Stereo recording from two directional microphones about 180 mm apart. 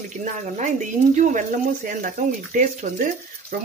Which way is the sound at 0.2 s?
45° right (ahead or behind).